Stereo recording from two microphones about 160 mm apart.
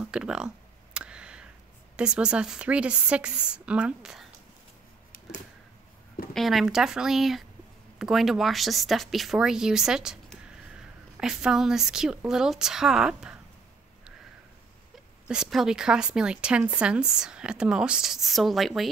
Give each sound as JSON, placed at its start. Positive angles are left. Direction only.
{"t": 0.0, "sound": "speech", "side_deg": -5}
{"t": 0.9, "sound": "a sound", "side_deg": -5}
{"t": 2.0, "sound": "a woman's voice", "side_deg": -5}
{"t": 6.3, "sound": "a woman's voice", "side_deg": 0}
{"t": 15.2, "sound": "a woman's voice", "side_deg": -5}